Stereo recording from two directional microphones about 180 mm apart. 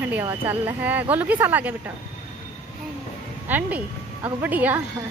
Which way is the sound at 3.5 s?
10° right (ahead or behind).